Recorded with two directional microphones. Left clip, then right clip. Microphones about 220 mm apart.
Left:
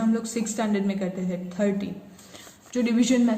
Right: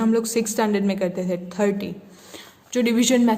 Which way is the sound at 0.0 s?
50° right (ahead or behind).